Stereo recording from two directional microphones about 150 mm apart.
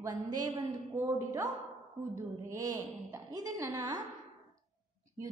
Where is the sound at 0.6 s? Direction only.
20° right (ahead or behind).